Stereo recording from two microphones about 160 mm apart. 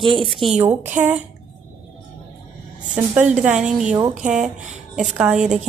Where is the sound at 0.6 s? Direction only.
15° right (ahead or behind).